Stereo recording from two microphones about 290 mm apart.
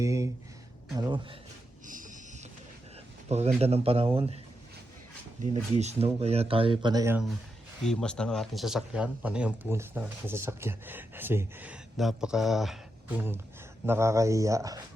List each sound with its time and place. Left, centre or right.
0.0 s a sound: centre
0.9 s speech: centre
1.9 s wild animals: right
3.2 s speech: right
5.4 s speech: right